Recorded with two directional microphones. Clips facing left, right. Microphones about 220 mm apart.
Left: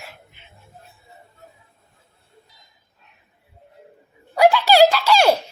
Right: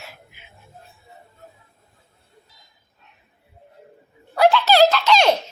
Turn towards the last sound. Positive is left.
turn(degrees=10)  # may be behind; listen again after turning